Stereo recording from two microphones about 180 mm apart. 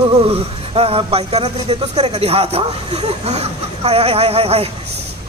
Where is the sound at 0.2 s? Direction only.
35° right (ahead or behind).